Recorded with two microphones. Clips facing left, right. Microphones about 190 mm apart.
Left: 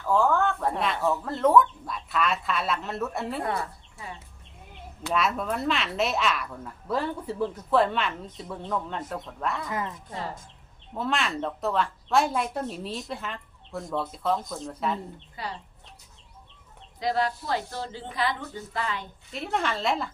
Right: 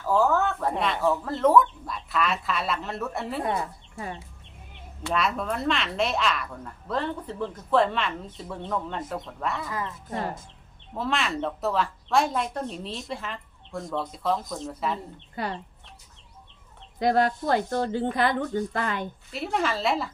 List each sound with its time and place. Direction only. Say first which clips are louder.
0.0 s speech: right 1 dB; 5° right (ahead or behind)
3.4 s speech: right 4 dB; 20° right (ahead or behind)
3.9 s speech: right 7 dB; 50° right (ahead or behind)
5.0 s speech: even; centre (ahead or behind)
9.6 s speech: left 1 dB; 20° left (ahead or behind)
10.1 s speech: right 4 dB; 55° right (ahead or behind)
10.9 s speech: right 1 dB; centre (ahead or behind)
15.4 s speech: right 5 dB; 55° right (ahead or behind)
17.0 s speech: right 4 dB; 50° right (ahead or behind)
19.3 s speech: right 1 dB; 5° right (ahead or behind)